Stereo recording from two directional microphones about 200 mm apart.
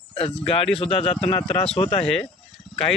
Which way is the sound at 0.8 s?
30° left (ahead or behind).